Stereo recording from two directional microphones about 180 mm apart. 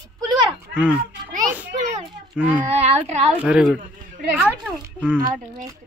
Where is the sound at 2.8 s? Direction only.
40° right (ahead or behind).